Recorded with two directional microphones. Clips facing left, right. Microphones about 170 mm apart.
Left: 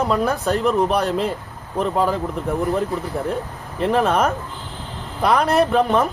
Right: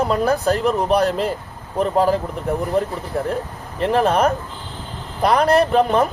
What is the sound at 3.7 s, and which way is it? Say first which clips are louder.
Speech: even; centre (ahead or behind).